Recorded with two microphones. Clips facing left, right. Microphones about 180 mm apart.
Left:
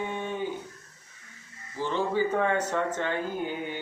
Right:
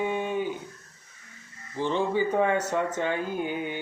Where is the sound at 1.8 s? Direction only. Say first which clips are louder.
Right 1 dB; 20° right (ahead or behind).